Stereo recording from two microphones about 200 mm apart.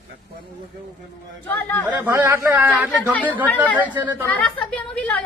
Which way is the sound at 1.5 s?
10° left (ahead or behind).